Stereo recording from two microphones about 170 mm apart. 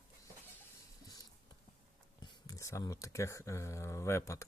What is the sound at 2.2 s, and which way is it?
Speech, 20° left (ahead or behind).